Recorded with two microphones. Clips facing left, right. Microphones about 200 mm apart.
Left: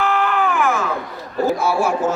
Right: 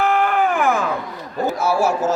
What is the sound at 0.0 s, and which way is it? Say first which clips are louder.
Baby cry: right 1 dB; 50° right (ahead or behind).